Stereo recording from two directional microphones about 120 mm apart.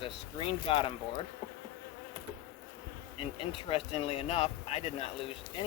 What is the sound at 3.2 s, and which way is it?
Speech, 50° left (ahead or behind).